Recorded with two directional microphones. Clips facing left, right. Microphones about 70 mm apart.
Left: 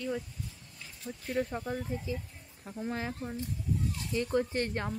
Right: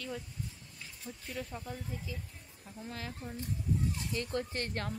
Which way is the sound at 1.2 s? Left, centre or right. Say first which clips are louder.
Left 9 dB; left.